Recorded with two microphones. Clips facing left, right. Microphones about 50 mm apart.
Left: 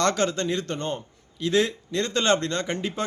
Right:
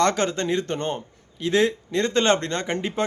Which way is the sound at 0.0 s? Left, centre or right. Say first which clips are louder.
Right 2 dB; right.